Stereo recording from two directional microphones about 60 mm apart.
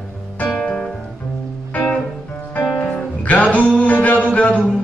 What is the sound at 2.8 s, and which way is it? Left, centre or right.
Music, left.